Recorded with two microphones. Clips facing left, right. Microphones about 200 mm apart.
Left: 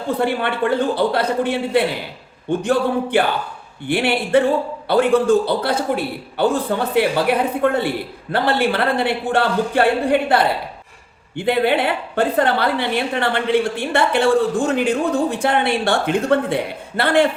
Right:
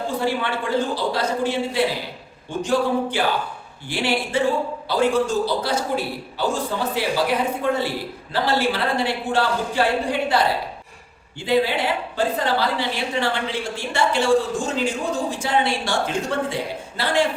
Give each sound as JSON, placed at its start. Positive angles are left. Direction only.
{"t": 0.2, "sound": "a woman's voice", "side_deg": 60}